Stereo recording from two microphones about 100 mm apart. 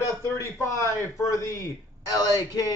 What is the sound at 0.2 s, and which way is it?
Speech, 30° left (ahead or behind).